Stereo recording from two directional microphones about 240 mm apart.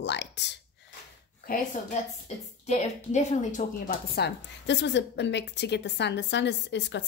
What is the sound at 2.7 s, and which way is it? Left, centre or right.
A woman's voice, left.